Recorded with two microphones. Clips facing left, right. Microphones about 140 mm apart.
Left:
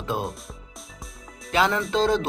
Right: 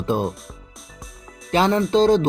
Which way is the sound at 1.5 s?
25° right (ahead or behind).